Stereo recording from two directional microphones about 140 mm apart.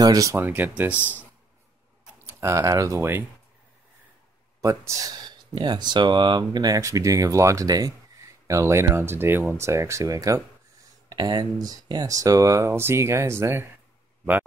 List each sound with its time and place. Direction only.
0.0 s speech: 25° right (ahead or behind)
0.9 s speech: 15° left (ahead or behind)
2.1 s speech: 20° right (ahead or behind)
4.6 s speech: 25° right (ahead or behind)